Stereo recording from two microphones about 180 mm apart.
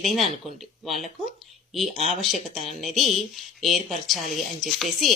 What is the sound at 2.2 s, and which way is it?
Speech, centre (ahead or behind).